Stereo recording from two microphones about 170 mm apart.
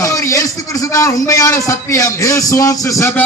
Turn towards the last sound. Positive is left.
turn(degrees=20)  # may be behind; listen again after turning